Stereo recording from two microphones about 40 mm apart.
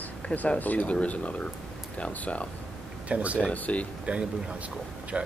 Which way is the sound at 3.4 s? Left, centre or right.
Left.